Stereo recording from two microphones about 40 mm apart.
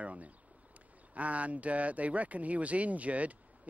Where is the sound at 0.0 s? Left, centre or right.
Right.